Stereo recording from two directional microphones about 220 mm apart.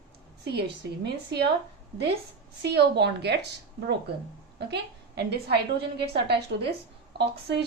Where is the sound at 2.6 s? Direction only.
50° right (ahead or behind).